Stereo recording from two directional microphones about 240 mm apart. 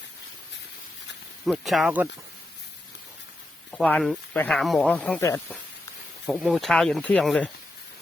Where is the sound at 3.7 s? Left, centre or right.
Centre.